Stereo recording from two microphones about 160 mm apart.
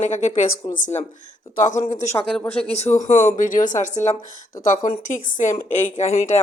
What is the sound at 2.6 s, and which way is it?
A woman's voice, 40° left (ahead or behind).